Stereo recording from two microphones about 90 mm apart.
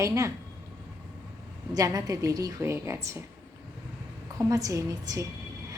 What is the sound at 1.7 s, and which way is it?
A woman's voice, 45° right (ahead or behind).